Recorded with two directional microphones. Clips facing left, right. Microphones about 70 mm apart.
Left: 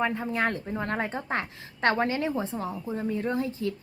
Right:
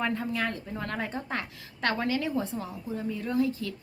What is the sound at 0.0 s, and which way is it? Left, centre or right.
A woman's voice, centre.